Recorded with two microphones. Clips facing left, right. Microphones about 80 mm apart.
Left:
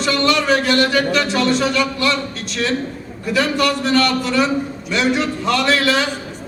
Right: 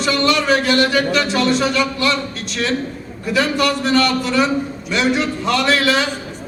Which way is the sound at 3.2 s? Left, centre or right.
Centre.